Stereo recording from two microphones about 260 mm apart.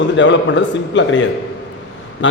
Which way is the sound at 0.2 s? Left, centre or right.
Left.